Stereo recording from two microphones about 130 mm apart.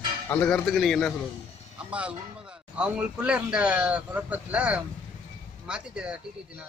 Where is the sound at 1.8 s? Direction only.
5° right (ahead or behind).